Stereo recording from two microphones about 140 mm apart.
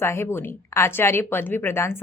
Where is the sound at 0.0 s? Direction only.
20° left (ahead or behind).